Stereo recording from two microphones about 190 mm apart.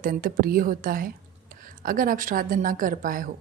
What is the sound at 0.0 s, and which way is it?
A woman's voice, 50° right (ahead or behind).